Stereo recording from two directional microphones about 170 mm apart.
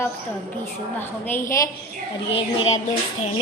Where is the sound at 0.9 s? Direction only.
10° left (ahead or behind).